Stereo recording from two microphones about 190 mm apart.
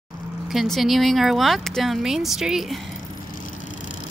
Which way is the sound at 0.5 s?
Centre (ahead or behind).